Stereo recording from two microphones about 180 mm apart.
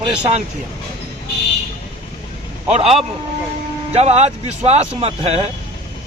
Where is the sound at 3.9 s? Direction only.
35° right (ahead or behind).